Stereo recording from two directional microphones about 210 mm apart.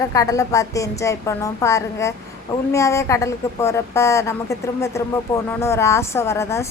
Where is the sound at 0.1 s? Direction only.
15° left (ahead or behind).